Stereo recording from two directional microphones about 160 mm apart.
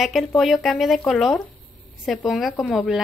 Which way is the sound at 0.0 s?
Centre (ahead or behind).